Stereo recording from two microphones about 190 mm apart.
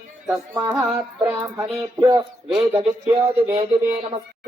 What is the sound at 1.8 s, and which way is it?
A man's voice, 20° right (ahead or behind).